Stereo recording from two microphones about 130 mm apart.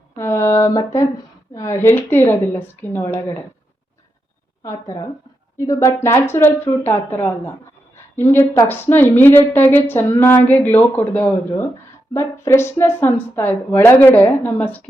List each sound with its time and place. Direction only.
0.2 s speech: 20° left (ahead or behind)
4.6 s speech: 25° left (ahead or behind)
7.9 s a sound: 15° left (ahead or behind)
8.6 s speech: 15° left (ahead or behind)